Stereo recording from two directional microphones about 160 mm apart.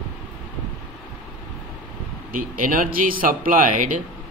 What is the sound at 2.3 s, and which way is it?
A man's voice, 60° right (ahead or behind).